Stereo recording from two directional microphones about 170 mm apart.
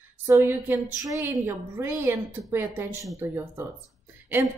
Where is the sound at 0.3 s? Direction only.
15° right (ahead or behind).